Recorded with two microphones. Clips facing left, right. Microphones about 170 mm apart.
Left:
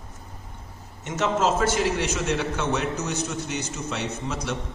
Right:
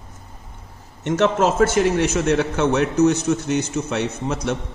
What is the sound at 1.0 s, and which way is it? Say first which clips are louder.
A man's voice: right 6 dB; 65° right (ahead or behind).